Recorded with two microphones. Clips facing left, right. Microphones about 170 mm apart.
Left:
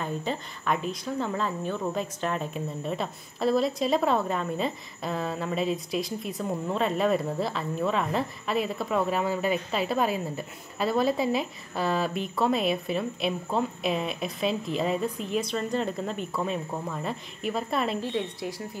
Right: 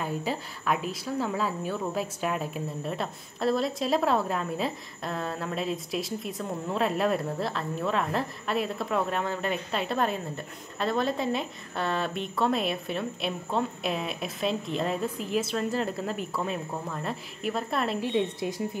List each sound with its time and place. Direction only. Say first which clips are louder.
0.0 s a woman's voice: even; 5° right (ahead or behind)
18.0 s a woman's voice: right 3 dB; 20° right (ahead or behind)